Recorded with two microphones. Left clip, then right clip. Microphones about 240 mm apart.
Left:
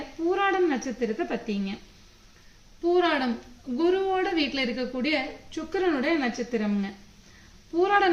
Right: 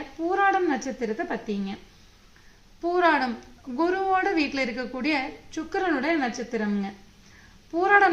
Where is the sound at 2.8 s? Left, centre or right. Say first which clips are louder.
Right 2 dB; centre.